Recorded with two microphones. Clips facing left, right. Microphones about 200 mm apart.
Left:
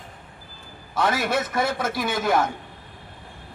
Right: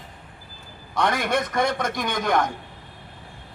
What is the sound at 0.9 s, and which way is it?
A man's voice, 5° left (ahead or behind).